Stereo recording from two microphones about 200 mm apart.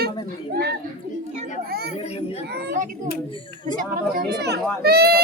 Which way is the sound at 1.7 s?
50° right (ahead or behind).